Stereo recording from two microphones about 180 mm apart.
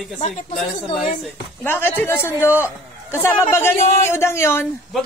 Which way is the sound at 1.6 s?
10° left (ahead or behind).